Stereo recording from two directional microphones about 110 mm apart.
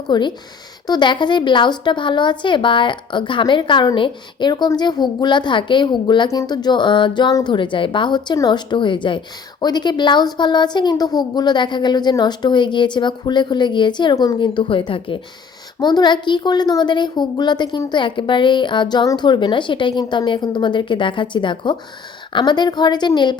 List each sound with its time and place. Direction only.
0.1 s a woman's voice: 45° left (ahead or behind)
15.8 s a woman's voice: 40° left (ahead or behind)